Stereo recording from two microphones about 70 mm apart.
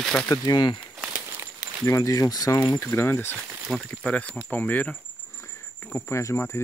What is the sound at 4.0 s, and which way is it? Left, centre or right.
Speech, centre.